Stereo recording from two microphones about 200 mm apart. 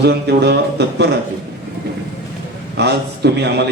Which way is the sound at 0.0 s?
55° right (ahead or behind).